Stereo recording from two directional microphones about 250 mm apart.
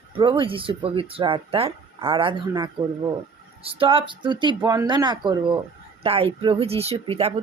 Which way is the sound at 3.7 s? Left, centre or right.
Right.